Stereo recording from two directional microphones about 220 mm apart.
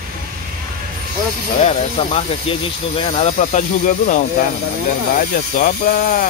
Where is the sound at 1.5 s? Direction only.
30° left (ahead or behind).